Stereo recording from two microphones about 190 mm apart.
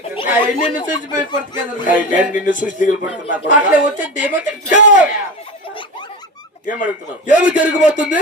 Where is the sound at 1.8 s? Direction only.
45° left (ahead or behind).